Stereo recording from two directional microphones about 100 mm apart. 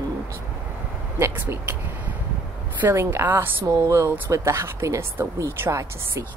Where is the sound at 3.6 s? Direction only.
35° right (ahead or behind).